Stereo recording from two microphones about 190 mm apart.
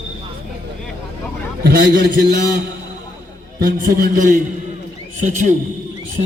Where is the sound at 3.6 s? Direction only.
50° right (ahead or behind).